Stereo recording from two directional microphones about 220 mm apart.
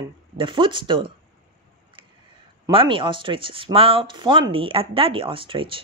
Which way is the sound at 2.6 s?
25° right (ahead or behind).